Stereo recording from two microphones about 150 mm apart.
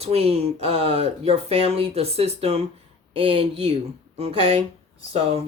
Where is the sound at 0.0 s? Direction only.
45° right (ahead or behind).